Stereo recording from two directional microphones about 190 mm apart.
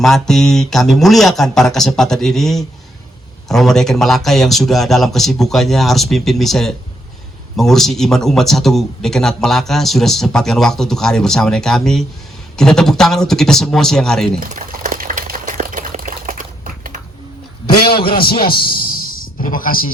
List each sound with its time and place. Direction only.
0.0 s a man's voice: centre (ahead or behind)
14.3 s liquid: 50° right (ahead or behind)
18.2 s a man's voice: 50° left (ahead or behind)